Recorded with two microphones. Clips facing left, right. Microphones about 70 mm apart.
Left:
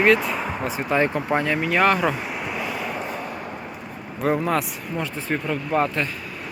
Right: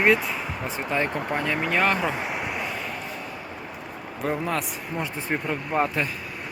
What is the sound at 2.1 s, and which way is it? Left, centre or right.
Speech, centre.